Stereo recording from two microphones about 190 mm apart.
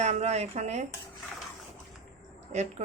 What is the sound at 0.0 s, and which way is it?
Speech, 35° right (ahead or behind).